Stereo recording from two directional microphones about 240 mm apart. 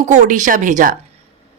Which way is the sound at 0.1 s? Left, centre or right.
Right.